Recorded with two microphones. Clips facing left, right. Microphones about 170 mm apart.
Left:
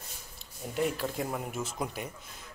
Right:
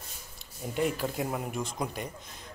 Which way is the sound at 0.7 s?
Centre (ahead or behind).